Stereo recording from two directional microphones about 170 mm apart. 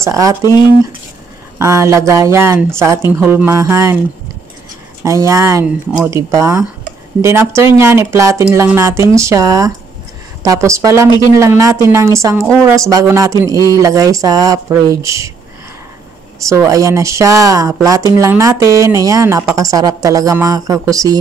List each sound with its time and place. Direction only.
0.0 s speech: 20° right (ahead or behind)
1.6 s speech: 15° right (ahead or behind)
5.0 s speech: 20° right (ahead or behind)
16.4 s speech: 20° right (ahead or behind)